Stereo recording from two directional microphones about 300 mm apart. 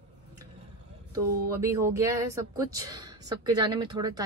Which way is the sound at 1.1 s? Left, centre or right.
Centre.